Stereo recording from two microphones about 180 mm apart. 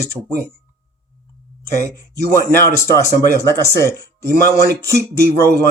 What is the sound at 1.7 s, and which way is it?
Speech, 60° right (ahead or behind).